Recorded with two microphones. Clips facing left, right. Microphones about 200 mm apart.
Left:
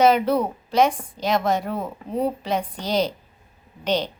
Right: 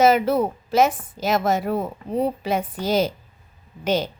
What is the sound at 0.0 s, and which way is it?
A woman's voice, 5° right (ahead or behind).